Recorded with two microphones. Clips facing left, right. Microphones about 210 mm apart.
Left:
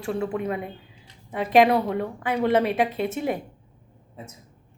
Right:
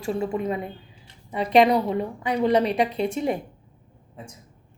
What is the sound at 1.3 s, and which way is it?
A woman's voice, 50° left (ahead or behind).